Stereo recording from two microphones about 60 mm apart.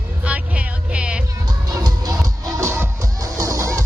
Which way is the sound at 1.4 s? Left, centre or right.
Right.